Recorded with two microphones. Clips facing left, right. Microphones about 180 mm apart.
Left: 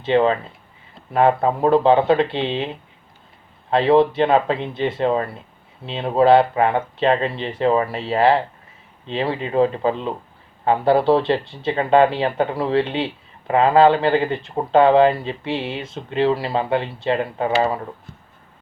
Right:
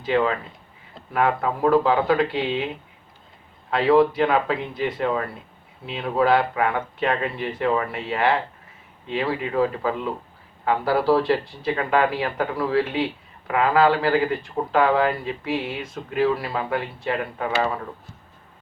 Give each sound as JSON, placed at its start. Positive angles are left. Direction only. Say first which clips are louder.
{"t": 0.0, "sound": "speech", "louder": "left 5 dB", "side_deg": 25}
{"t": 3.7, "sound": "speech", "louder": "left 2 dB", "side_deg": 25}